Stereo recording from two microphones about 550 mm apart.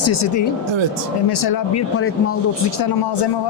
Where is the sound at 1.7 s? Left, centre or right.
Left.